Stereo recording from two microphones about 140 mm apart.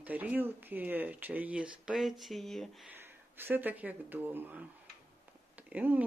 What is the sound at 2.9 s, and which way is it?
Speech, 15° right (ahead or behind).